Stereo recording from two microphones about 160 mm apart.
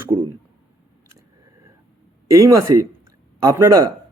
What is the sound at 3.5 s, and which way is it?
Speech, 20° right (ahead or behind).